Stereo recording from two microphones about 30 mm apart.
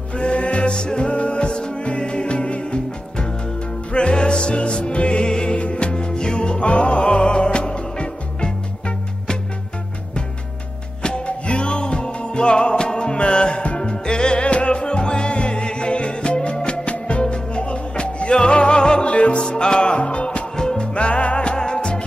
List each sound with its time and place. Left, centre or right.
0.1 s music: left
3.9 s music: left
11.0 s music: left
19.0 s music: left
19.4 s music: left
21.5 s music: left